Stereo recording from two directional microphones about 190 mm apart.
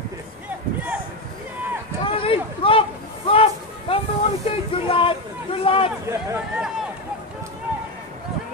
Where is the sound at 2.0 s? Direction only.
30° left (ahead or behind).